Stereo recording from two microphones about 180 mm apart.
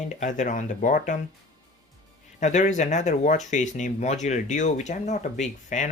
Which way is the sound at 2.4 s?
40° left (ahead or behind).